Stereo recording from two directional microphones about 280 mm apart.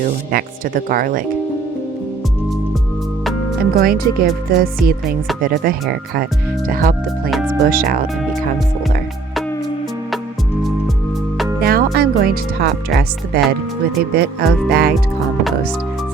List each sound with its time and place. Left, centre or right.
0.0 s speech: right
3.6 s speech: right
8.0 s speech: centre
11.6 s speech: right